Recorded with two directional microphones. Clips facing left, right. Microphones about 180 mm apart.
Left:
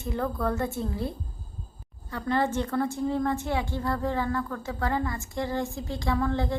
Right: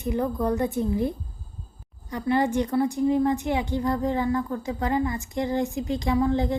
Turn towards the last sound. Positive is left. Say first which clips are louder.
# right 4 dB
turn(degrees=-20)  # may be behind; listen again after turning